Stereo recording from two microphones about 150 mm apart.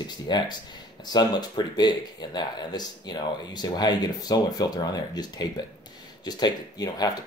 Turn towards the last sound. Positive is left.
turn(degrees=25)  # may be behind; listen again after turning